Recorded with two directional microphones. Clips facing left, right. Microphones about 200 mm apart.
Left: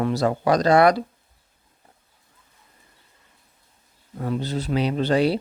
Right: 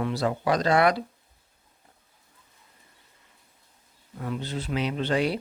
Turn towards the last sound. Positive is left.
turn(degrees=35)  # may be behind; listen again after turning